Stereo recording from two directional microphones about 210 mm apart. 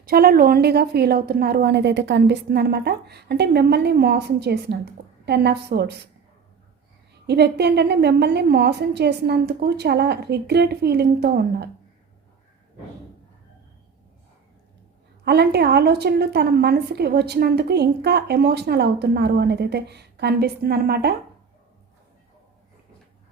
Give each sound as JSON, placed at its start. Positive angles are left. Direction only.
{"t": 0.0, "sound": "a woman's voice", "side_deg": -45}
{"t": 7.3, "sound": "a woman's voice", "side_deg": -50}
{"t": 15.2, "sound": "a woman's voice", "side_deg": -50}